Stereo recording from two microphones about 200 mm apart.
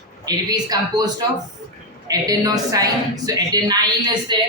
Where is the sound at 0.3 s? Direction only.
20° right (ahead or behind).